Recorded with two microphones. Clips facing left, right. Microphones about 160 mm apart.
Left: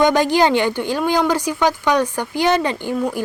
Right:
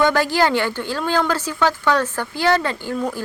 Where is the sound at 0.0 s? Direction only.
20° left (ahead or behind).